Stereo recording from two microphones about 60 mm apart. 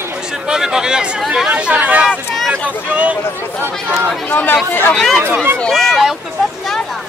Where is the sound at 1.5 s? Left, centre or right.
Right.